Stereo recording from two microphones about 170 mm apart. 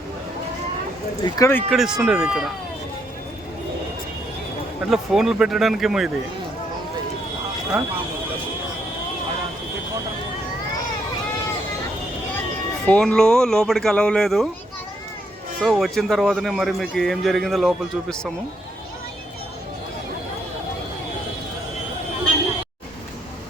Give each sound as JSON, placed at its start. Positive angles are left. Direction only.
{"t": 1.2, "sound": "speech", "side_deg": 15}
{"t": 1.7, "sound": "a man's voice", "side_deg": 0}
{"t": 4.9, "sound": "a man's voice", "side_deg": 0}
{"t": 12.8, "sound": "a man's voice", "side_deg": 5}
{"t": 15.6, "sound": "a man's voice", "side_deg": 0}